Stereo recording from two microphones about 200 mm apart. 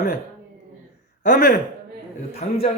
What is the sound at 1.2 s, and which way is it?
Speech, 40° left (ahead or behind).